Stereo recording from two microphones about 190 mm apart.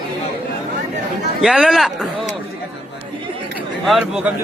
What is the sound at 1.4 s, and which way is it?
Speech, centre (ahead or behind).